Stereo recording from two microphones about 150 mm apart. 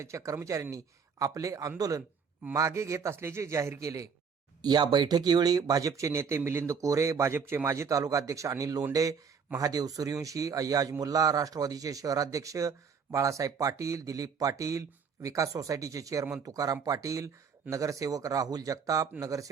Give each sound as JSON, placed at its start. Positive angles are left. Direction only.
{"t": 0.0, "sound": "a man's voice", "side_deg": -20}